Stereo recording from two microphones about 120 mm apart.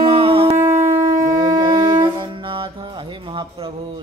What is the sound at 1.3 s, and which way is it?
Wind instrument, 35° right (ahead or behind).